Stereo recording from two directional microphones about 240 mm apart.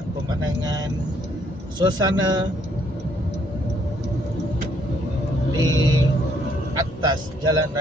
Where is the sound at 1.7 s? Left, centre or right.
Centre.